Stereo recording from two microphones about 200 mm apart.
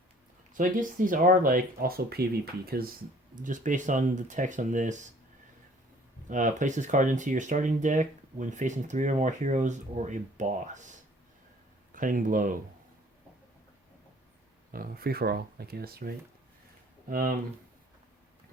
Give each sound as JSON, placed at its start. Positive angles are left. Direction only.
{"t": 0.5, "sound": "speech", "side_deg": -40}
{"t": 6.2, "sound": "speech", "side_deg": -40}
{"t": 11.9, "sound": "speech", "side_deg": -40}
{"t": 14.7, "sound": "speech", "side_deg": -50}